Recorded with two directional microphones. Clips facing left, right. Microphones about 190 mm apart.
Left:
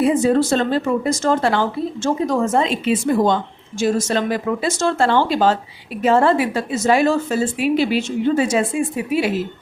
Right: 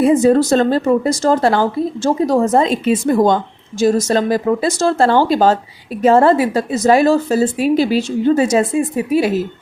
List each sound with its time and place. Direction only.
0.0 s a woman's voice: 45° right (ahead or behind)